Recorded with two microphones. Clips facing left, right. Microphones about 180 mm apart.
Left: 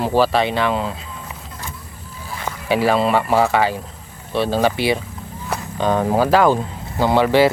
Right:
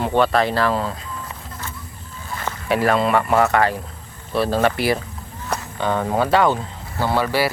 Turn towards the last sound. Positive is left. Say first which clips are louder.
# left 6 dB
turn(degrees=20)  # may be behind; listen again after turning